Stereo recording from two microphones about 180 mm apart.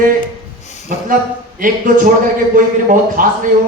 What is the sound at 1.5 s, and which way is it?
A man's voice, 50° right (ahead or behind).